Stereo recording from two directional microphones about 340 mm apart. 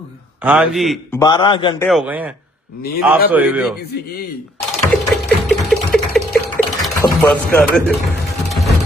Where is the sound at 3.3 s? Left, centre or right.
Centre.